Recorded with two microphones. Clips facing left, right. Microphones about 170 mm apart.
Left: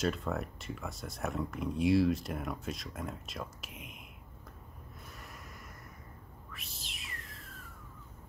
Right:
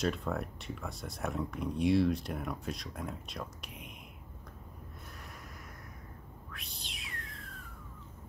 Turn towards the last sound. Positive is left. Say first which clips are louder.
# right 2 dB
turn(degrees=0)  # may be behind; listen again after turning